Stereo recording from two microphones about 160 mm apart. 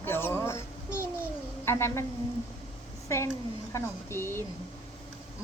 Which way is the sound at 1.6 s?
15° left (ahead or behind).